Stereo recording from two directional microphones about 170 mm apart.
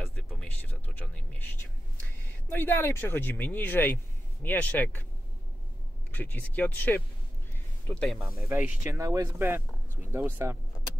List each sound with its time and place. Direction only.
0.0 s a sound: 5° left (ahead or behind)
2.5 s speech: 15° left (ahead or behind)
6.1 s speech: 10° left (ahead or behind)
8.5 s speech: 10° right (ahead or behind)